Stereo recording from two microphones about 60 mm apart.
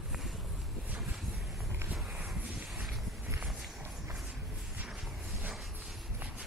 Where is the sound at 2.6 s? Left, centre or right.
Centre.